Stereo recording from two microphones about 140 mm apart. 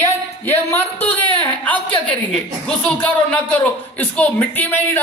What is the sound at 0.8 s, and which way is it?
Speech, 45° left (ahead or behind).